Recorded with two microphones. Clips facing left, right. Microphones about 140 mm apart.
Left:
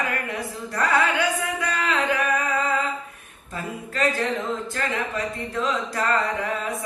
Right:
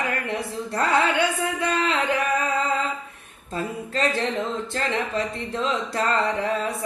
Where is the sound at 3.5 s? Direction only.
30° right (ahead or behind).